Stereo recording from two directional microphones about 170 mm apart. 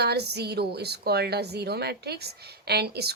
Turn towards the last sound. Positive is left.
turn(degrees=-70)  # may be behind; listen again after turning